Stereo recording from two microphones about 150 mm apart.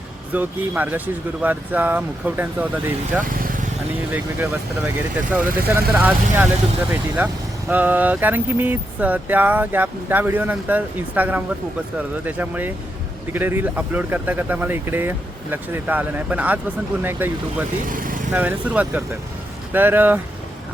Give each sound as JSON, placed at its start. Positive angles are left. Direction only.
{"t": 0.3, "sound": "speech", "side_deg": -10}
{"t": 3.2, "sound": "vehicle", "side_deg": -70}
{"t": 4.1, "sound": "speech", "side_deg": -15}
{"t": 7.7, "sound": "speech", "side_deg": -10}
{"t": 17.8, "sound": "speech", "side_deg": -65}
{"t": 18.3, "sound": "speech", "side_deg": -10}